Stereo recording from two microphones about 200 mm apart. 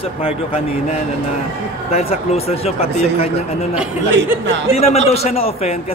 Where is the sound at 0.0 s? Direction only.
30° left (ahead or behind).